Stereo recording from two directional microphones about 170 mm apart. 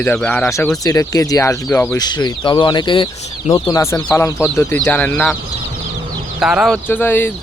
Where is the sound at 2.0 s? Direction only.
25° left (ahead or behind).